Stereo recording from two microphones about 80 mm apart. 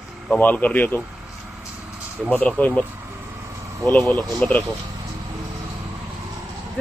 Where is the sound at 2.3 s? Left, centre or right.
Centre.